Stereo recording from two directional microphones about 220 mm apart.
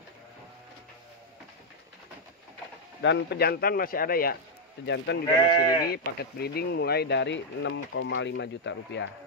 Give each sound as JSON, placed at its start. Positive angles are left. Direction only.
{"t": 3.0, "sound": "speech", "side_deg": 55}
{"t": 4.8, "sound": "speech", "side_deg": 50}
{"t": 5.4, "sound": "speech", "side_deg": 20}
{"t": 5.9, "sound": "speech", "side_deg": 45}